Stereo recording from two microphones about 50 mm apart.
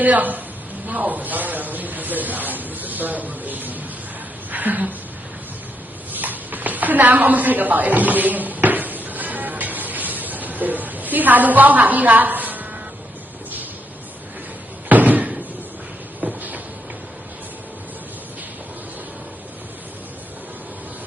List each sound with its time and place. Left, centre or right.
0.0 s a man's voice: right
6.1 s a sound: right
14.8 s slam: right
16.2 s vehicle: right